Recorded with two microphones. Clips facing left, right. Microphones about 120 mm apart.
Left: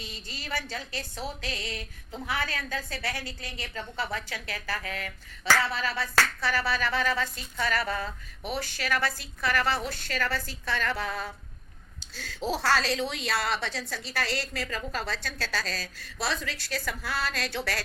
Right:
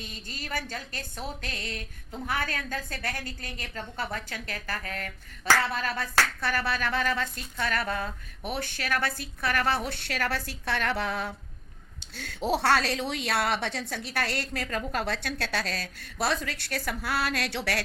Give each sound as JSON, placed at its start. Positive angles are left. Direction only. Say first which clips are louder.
{"t": 0.0, "sound": "a woman's voice", "louder": "right 1 dB", "side_deg": -50}